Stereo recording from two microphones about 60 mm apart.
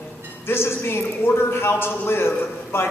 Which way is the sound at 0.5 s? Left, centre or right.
Left.